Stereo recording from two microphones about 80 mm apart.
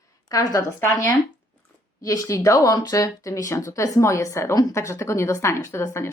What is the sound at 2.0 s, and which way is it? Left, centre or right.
Speech, left.